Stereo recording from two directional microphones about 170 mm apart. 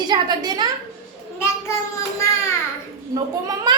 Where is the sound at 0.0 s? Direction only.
25° right (ahead or behind).